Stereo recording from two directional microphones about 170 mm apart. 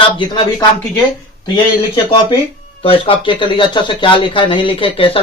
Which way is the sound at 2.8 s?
30° left (ahead or behind).